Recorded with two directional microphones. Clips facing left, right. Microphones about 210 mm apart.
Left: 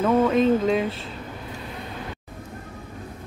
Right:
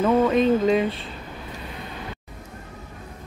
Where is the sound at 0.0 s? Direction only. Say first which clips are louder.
Even; centre (ahead or behind).